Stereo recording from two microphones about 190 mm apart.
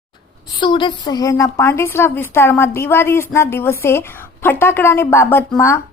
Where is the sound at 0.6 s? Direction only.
25° left (ahead or behind).